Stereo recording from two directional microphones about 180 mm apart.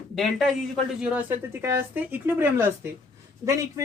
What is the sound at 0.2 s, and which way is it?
A woman's voice, centre (ahead or behind).